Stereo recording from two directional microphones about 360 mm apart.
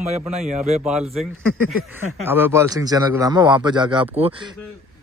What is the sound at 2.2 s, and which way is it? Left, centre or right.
A man's voice, centre.